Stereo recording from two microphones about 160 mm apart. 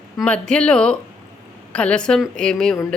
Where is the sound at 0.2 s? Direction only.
5° left (ahead or behind).